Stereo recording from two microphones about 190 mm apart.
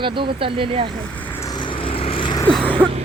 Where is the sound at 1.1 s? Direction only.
10° left (ahead or behind); by 2.4 s 25° left (ahead or behind).